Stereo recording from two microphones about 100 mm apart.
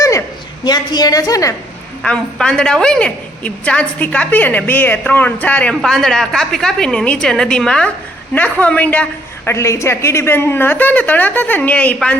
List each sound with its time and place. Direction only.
0.0 s a sound: 30° left (ahead or behind)
0.6 s a woman's voice: 45° left (ahead or behind)
2.0 s a woman's voice: 10° left (ahead or behind)
9.5 s a woman's voice: 30° left (ahead or behind)